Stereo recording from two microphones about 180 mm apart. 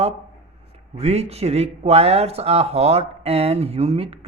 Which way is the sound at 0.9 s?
35° right (ahead or behind).